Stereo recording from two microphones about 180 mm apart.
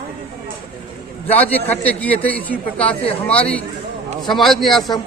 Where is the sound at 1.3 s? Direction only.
10° left (ahead or behind).